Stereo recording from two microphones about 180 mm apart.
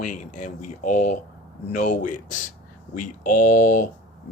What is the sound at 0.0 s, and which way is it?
Speech, 45° left (ahead or behind).